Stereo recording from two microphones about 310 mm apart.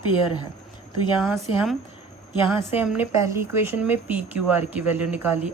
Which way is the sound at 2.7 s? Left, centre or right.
Centre.